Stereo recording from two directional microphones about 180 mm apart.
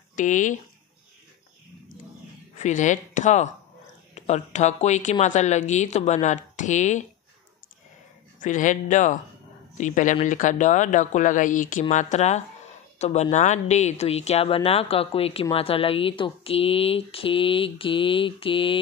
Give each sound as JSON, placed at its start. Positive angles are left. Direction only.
{"t": 0.1, "sound": "speech", "side_deg": 45}
{"t": 2.6, "sound": "speech", "side_deg": 45}
{"t": 8.4, "sound": "speech", "side_deg": 45}